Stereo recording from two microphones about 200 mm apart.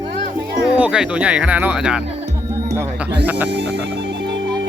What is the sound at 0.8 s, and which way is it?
Speech, 5° right (ahead or behind).